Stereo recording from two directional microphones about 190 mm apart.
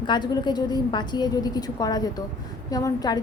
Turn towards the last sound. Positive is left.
turn(degrees=20)  # may be behind; listen again after turning